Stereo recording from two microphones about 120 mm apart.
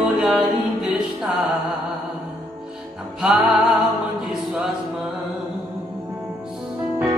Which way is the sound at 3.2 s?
Centre (ahead or behind).